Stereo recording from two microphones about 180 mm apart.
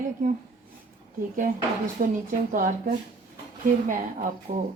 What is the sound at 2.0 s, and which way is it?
A woman's voice, 50° right (ahead or behind).